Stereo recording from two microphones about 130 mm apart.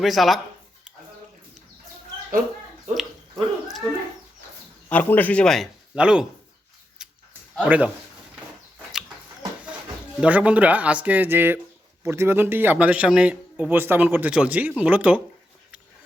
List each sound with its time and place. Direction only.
0.0 s speech: centre (ahead or behind)
2.9 s a sound: centre (ahead or behind)
4.9 s speech: 10° left (ahead or behind); by 6.2 s 5° right (ahead or behind)
7.0 s a sound: 5° right (ahead or behind)
7.6 s a man's voice: 10° right (ahead or behind)
10.2 s a man's voice: 10° right (ahead or behind)